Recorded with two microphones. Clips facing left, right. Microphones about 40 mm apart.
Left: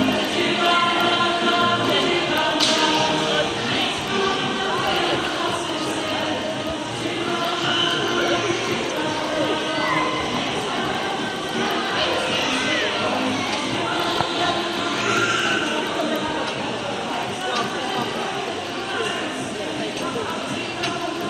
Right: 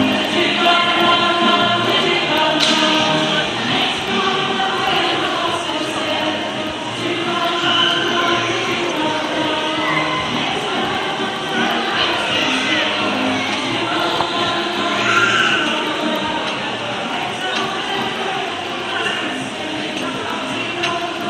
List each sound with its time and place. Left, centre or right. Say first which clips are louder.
0.0 s music: right 4 dB; right
4.8 s chant: right 4 dB; right
7.6 s music: right 6 dB; right
9.4 s a sound: right 3 dB; right
11.6 s music: right 4 dB; right
15.0 s choir: right 6 dB; right